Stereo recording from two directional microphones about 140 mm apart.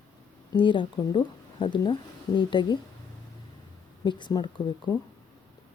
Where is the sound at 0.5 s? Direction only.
35° left (ahead or behind).